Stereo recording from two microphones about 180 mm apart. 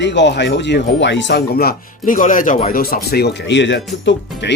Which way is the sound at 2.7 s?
55° left (ahead or behind).